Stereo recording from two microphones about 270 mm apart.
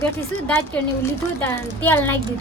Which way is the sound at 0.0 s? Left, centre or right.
Centre.